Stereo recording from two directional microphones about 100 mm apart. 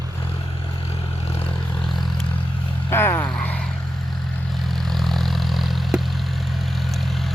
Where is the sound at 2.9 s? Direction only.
25° left (ahead or behind).